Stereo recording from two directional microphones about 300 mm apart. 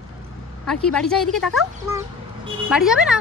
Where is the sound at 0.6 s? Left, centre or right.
Centre.